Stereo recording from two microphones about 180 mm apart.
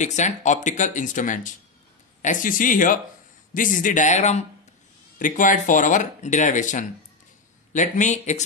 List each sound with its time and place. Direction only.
0.0 s speech: 40° left (ahead or behind)